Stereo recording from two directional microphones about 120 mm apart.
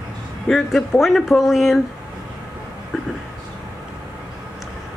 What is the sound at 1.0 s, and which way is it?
Speech, centre (ahead or behind).